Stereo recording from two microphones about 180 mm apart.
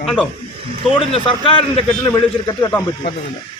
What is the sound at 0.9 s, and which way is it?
A man's voice, 30° left (ahead or behind).